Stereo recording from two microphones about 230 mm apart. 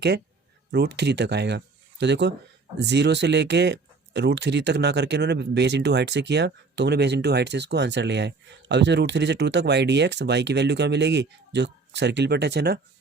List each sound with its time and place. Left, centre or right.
0.7 s speech: right